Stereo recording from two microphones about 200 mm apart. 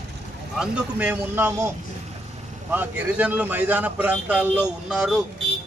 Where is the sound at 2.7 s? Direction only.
10° right (ahead or behind).